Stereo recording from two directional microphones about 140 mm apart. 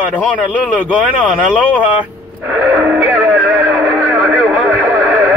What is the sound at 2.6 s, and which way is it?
Speech, 10° right (ahead or behind).